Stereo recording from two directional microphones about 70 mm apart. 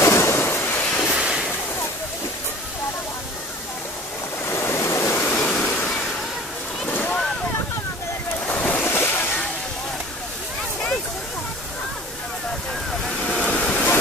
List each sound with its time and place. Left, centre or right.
0.0 s a sound: left
1.1 s a sound: centre
4.5 s waves: left
5.3 s waterfall: centre
6.9 s boat: left
8.5 s waves: left
13.0 s waterfall: centre